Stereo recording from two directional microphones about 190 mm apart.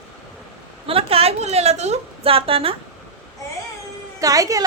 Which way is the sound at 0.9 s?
30° right (ahead or behind).